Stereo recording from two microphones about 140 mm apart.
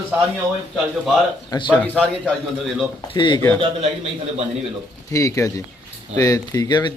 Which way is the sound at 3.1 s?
35° left (ahead or behind).